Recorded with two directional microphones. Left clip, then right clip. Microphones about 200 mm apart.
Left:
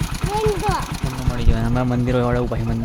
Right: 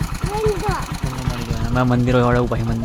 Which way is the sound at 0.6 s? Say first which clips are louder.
Left 1 dB; 20° left (ahead or behind).